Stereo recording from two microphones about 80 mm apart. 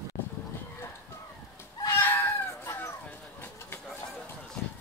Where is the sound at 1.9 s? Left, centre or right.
Left.